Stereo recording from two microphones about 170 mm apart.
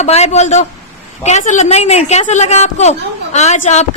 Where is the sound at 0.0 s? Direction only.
40° left (ahead or behind).